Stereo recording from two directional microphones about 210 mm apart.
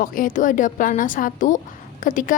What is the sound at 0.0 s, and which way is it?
A woman's voice, 40° left (ahead or behind).